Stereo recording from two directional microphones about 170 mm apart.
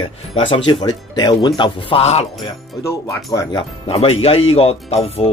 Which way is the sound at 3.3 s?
20° left (ahead or behind).